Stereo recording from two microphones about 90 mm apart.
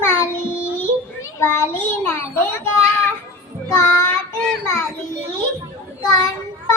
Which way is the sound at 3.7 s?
35° left (ahead or behind).